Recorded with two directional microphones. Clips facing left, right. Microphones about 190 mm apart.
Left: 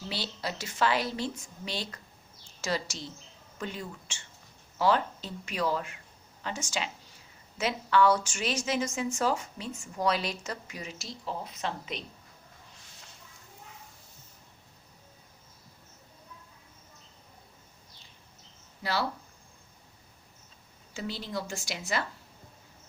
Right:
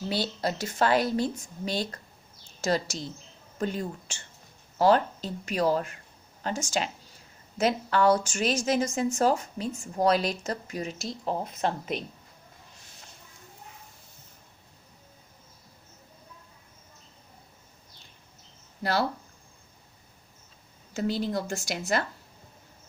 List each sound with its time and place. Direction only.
0.1 s speech: 50° right (ahead or behind)
18.8 s speech: 50° right (ahead or behind)
20.9 s speech: 50° right (ahead or behind)